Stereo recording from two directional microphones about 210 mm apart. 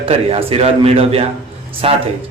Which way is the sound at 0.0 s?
25° right (ahead or behind).